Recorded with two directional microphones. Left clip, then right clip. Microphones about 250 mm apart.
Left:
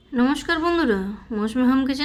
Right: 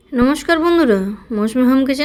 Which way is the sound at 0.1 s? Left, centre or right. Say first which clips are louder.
Right 7 dB; centre.